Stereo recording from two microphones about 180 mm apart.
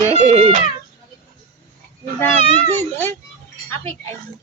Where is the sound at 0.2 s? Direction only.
30° right (ahead or behind).